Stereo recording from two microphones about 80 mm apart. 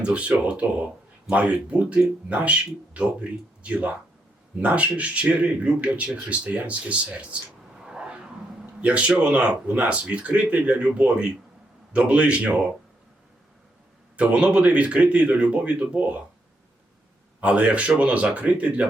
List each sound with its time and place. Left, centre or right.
0.0 s speech: centre
7.9 s a sound: centre
8.8 s speech: centre
14.2 s speech: centre
17.4 s speech: centre